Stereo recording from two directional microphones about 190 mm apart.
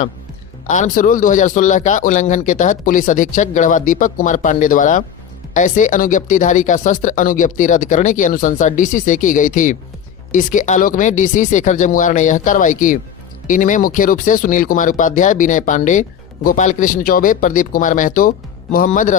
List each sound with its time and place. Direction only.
0.7 s speech: 45° left (ahead or behind)